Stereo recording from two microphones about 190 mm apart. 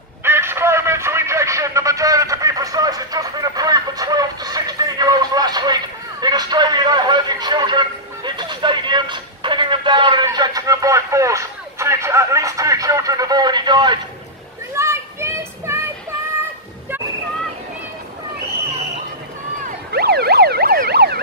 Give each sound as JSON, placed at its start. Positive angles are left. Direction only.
{"t": 0.2, "sound": "radio", "side_deg": -10}
{"t": 6.2, "sound": "a sound", "side_deg": -20}
{"t": 19.9, "sound": "emergency vehicle", "side_deg": -55}